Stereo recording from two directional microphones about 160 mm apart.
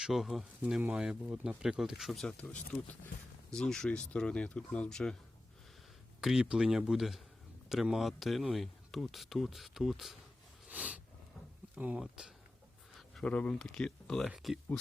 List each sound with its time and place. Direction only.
0.0 s speech: centre (ahead or behind)
6.2 s speech: 5° right (ahead or behind)
10.7 s a sound: 10° right (ahead or behind)
11.8 s speech: 5° right (ahead or behind)